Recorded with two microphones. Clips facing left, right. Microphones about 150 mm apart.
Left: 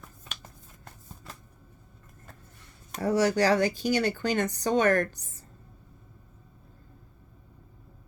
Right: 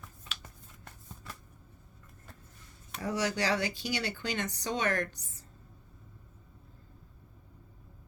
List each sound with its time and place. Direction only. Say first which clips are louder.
2.9 s speech: left 8 dB; 40° left (ahead or behind)